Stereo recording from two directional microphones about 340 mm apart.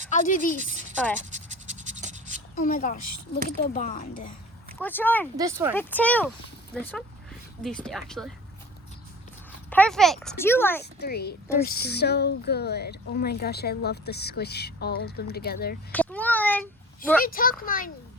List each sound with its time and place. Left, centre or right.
0.1 s speech: left
1.2 s scratch: right
2.6 s speech: left
4.8 s speech: centre
5.4 s speech: centre
5.7 s speech: centre
9.6 s speech: centre
11.0 s speech: left
15.9 s a sound: centre
17.2 s speech: left